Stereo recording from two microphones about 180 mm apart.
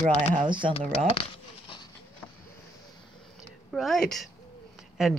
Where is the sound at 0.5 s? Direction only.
25° right (ahead or behind).